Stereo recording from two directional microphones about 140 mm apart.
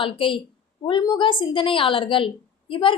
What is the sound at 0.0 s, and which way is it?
A woman's voice, 35° left (ahead or behind).